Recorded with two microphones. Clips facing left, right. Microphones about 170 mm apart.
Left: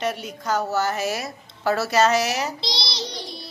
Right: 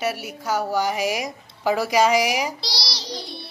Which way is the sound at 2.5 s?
20° left (ahead or behind).